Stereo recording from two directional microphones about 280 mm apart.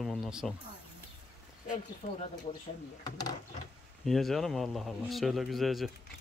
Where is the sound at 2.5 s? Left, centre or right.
Left.